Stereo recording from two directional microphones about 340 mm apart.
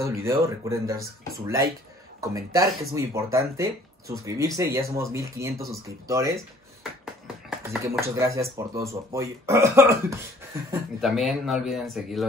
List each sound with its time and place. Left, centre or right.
0.0 s speech: centre
2.3 s speech: centre